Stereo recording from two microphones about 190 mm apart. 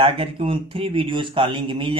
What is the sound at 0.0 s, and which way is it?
Speech, 30° right (ahead or behind).